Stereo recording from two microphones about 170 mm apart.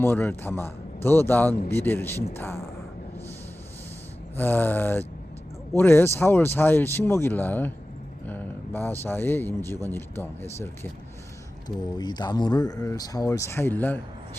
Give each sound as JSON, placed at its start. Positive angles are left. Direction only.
{"t": 0.0, "sound": "a man's voice", "side_deg": 10}
{"t": 4.4, "sound": "a man's voice", "side_deg": 10}
{"t": 11.9, "sound": "speech", "side_deg": 25}